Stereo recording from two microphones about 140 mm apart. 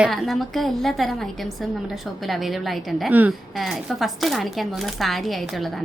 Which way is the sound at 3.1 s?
10° right (ahead or behind).